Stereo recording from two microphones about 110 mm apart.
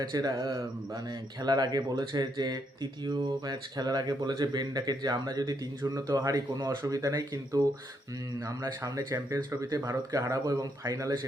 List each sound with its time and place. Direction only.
0.0 s speech: 35° right (ahead or behind)